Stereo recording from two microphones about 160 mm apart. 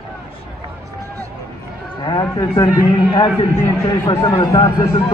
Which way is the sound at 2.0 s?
25° left (ahead or behind).